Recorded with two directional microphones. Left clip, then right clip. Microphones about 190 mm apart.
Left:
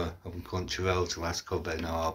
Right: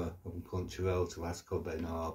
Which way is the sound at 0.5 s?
5° right (ahead or behind).